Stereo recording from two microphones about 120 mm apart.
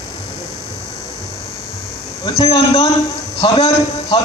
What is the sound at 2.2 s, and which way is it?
A man's voice, 55° left (ahead or behind).